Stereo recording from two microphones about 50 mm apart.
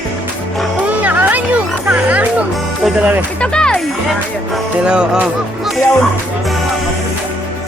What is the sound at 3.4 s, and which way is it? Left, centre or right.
Music, centre.